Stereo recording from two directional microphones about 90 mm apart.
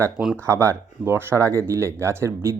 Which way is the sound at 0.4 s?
35° right (ahead or behind).